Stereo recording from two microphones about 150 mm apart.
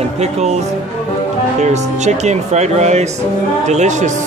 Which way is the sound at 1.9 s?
50° right (ahead or behind).